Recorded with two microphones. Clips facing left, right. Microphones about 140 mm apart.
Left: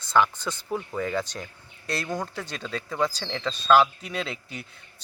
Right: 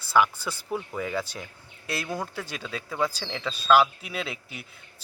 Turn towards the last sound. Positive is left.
turn(degrees=-5)  # may be behind; listen again after turning